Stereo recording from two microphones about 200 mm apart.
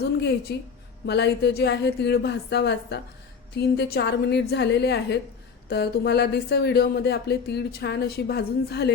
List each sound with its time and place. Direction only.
0.0 s speech: 55° left (ahead or behind)